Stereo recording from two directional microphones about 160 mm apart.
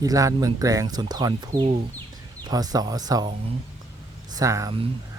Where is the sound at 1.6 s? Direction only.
40° right (ahead or behind).